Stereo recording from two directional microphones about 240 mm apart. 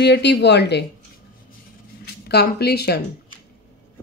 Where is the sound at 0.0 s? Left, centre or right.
Left.